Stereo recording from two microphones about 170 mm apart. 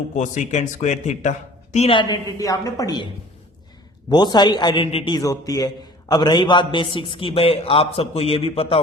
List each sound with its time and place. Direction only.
0.2 s a man's voice: 45° left (ahead or behind); by 3.1 s 20° left (ahead or behind)
4.1 s a man's voice: 25° left (ahead or behind)